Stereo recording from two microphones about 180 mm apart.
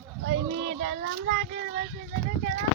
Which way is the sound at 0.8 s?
80° right.